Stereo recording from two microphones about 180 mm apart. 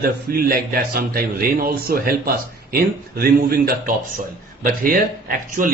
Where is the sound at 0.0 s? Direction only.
55° right (ahead or behind).